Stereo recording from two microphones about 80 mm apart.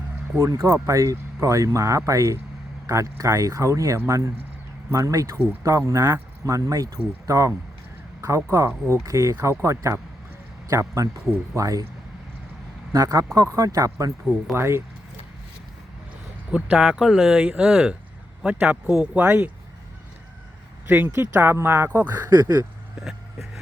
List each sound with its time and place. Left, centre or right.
0.3 s speech: right
12.9 s speech: right
14.5 s speech: right
16.5 s speech: centre
20.8 s speech: right
22.3 s speech: right
23.0 s vehicle: centre